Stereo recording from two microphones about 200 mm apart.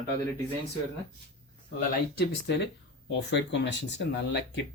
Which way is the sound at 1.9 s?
55° left (ahead or behind).